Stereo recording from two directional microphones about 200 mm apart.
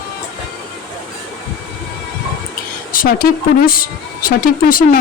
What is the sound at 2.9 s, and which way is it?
Speech, 45° left (ahead or behind).